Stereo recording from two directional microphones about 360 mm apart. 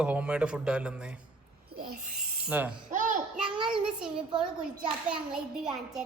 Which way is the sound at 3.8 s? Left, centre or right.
Centre.